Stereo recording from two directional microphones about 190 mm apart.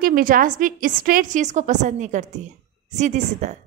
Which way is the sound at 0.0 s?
50° right (ahead or behind).